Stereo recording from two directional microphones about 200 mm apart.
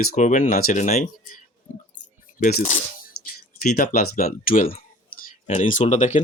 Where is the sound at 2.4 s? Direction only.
45° left (ahead or behind).